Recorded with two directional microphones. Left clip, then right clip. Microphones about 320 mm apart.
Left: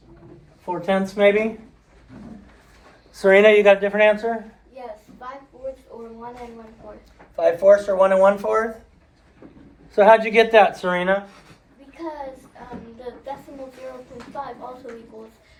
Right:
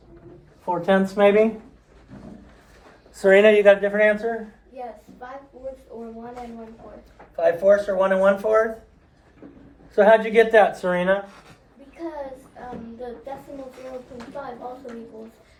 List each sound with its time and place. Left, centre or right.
0.6 s speech: centre
3.2 s speech: centre
7.3 s speech: left
9.9 s speech: centre